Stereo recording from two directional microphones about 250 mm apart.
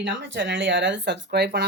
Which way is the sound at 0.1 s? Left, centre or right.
Right.